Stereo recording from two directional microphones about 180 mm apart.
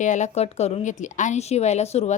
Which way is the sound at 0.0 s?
40° left (ahead or behind).